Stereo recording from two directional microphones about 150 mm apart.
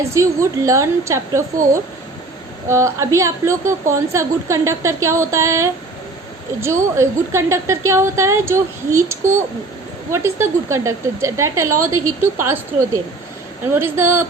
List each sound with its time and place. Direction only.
0.0 s a woman's voice: 20° right (ahead or behind)
2.6 s a woman's voice: 20° right (ahead or behind)
13.7 s speech: 15° right (ahead or behind)